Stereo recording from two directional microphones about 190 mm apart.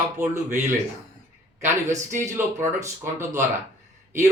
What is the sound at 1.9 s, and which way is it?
Speech, 40° right (ahead or behind).